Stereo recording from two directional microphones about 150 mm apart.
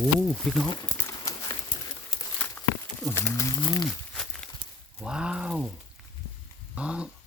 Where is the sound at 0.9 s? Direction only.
20° left (ahead or behind).